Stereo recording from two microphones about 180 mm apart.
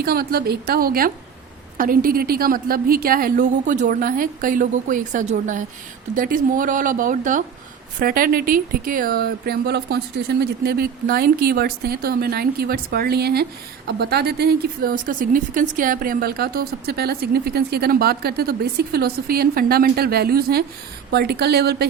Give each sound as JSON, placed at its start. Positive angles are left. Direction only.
{"t": 0.0, "sound": "a woman's voice", "side_deg": -60}